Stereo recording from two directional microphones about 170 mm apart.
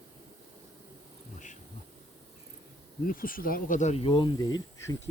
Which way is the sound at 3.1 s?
55° left (ahead or behind).